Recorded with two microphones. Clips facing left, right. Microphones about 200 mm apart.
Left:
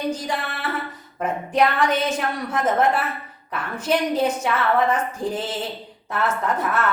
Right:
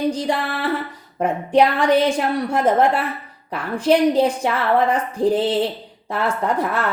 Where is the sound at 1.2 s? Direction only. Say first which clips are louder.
Right 4 dB; 30° right (ahead or behind).